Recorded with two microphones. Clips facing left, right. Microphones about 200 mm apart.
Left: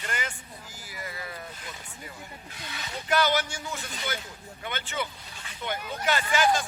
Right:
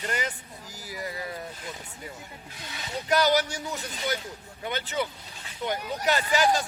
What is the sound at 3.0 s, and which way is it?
Speech, 40° right (ahead or behind).